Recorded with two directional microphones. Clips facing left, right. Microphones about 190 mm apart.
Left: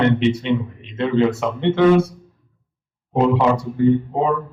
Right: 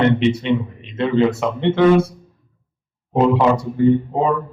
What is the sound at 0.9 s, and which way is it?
Speech, 30° right (ahead or behind).